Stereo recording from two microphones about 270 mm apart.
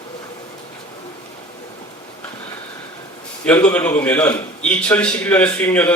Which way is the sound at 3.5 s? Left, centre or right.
Centre.